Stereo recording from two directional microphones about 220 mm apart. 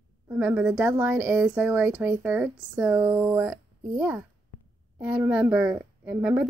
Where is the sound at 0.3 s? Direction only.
5° right (ahead or behind).